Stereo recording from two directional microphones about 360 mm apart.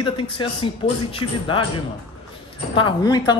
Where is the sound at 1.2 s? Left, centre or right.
Left.